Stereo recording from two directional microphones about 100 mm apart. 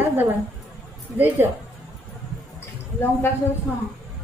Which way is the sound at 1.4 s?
20° right (ahead or behind).